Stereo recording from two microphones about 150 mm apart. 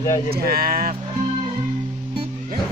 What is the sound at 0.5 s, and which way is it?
Speech, 85° right.